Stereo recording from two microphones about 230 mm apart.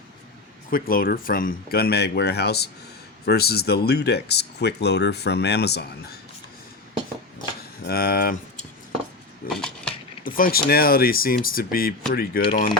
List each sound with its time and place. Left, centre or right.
0.7 s speech: left
7.9 s speech: left
9.5 s a sound: centre
10.2 s speech: left